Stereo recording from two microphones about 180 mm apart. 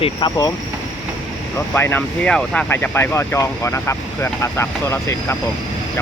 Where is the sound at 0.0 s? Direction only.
25° left (ahead or behind).